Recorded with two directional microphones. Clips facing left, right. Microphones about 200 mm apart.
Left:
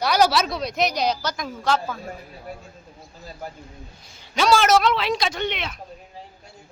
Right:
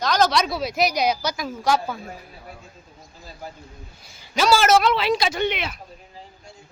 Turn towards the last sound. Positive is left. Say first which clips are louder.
# right 3 dB
turn(degrees=-5)  # may be behind; listen again after turning